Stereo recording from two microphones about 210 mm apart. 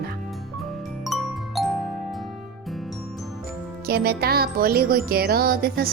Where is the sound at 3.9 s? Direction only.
45° right (ahead or behind).